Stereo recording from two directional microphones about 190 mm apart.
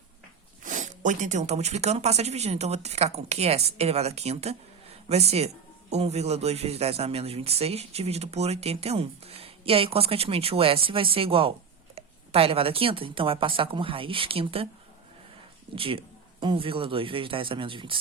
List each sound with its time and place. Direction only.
0.6 s a man's voice: 40° right (ahead or behind)
15.7 s speech: 30° right (ahead or behind)